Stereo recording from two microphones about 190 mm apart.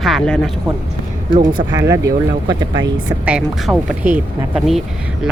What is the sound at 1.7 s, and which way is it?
Speech, 15° right (ahead or behind).